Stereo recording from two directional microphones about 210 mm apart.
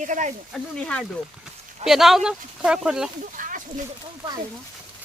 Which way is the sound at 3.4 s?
40° right (ahead or behind).